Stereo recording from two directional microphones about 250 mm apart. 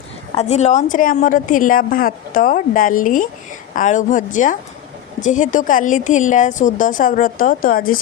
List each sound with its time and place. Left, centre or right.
0.3 s a woman's voice: left